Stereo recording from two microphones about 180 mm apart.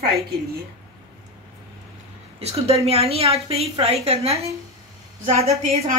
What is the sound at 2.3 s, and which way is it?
A woman's voice, 35° right (ahead or behind).